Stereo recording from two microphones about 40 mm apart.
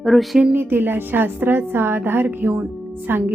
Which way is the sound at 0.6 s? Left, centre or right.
Right.